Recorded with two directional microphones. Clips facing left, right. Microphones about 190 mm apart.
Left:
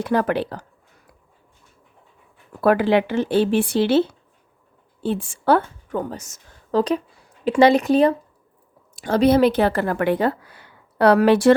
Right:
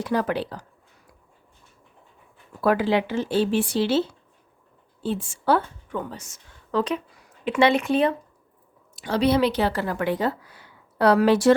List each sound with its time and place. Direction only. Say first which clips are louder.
0.0 s speech: left 4 dB; 55° left (ahead or behind)
2.6 s speech: left 4 dB; 60° left (ahead or behind)
5.0 s a woman's voice: left 4 dB; 55° left (ahead or behind)
6.0 s a woman's voice: left 5 dB; 40° left (ahead or behind); by 11.5 s 60° left (ahead or behind)